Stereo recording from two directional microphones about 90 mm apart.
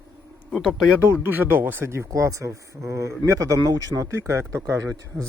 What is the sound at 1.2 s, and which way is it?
Speech, 25° right (ahead or behind).